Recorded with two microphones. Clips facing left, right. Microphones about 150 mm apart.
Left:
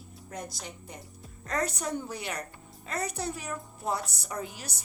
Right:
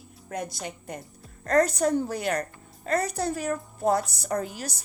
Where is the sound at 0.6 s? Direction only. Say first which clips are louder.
Right 7 dB; 60° right (ahead or behind).